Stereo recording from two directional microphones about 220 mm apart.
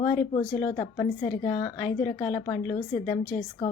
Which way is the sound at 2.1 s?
10° left (ahead or behind).